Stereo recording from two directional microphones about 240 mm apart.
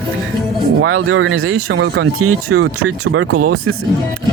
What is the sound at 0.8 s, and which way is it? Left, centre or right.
Speech, right.